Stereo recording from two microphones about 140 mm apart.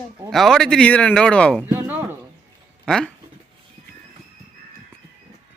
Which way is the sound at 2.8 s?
5° left (ahead or behind).